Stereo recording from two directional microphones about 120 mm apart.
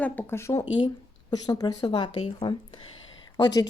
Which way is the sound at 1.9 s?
45° left (ahead or behind).